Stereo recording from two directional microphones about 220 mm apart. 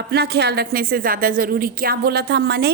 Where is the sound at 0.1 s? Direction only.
45° right (ahead or behind).